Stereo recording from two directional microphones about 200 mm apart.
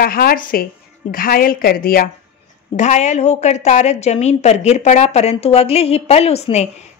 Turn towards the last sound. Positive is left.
turn(degrees=30)  # may be behind; listen again after turning